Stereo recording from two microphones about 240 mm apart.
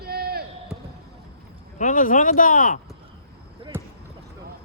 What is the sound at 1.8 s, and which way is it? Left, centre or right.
Speech, left.